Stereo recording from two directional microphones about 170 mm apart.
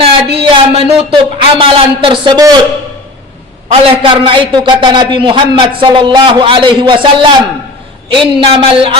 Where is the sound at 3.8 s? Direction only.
30° right (ahead or behind).